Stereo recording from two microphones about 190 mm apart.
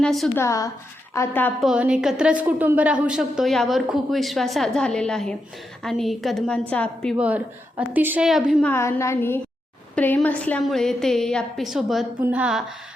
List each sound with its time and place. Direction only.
0.0 s a woman's voice: centre (ahead or behind)
0.3 s a woman's voice: 15° left (ahead or behind)
1.6 s a woman's voice: 5° right (ahead or behind)
8.7 s a woman's voice: 15° left (ahead or behind); by 12.6 s 5° right (ahead or behind)